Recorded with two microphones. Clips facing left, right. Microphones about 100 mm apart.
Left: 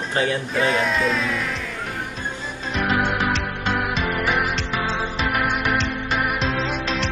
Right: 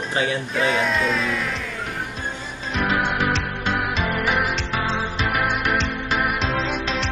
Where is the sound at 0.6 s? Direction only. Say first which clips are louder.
Even; centre (ahead or behind).